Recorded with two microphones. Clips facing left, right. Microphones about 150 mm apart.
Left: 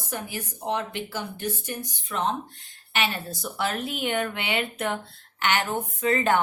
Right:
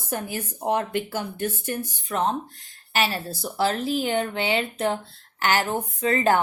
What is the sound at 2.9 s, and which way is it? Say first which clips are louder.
Speech: right 3 dB; 35° right (ahead or behind).